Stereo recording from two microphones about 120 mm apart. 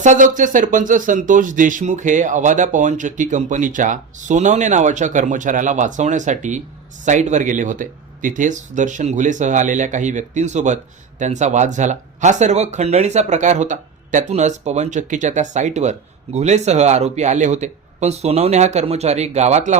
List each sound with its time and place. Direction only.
0.0 s speech: 90° right; by 19.7 s 70° right (ahead or behind)